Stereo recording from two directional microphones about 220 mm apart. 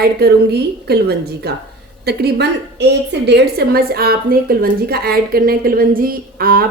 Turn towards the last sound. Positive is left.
turn(degrees=-40)  # may be behind; listen again after turning